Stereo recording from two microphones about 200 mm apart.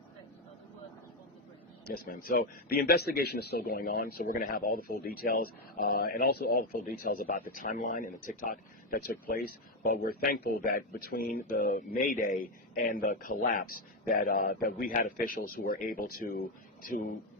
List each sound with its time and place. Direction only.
1.9 s speech: 45° left (ahead or behind)